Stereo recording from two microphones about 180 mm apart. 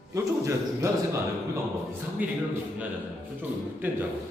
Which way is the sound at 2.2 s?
10° right (ahead or behind).